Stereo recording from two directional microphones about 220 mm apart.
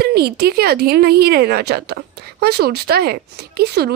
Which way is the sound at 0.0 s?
45° right (ahead or behind).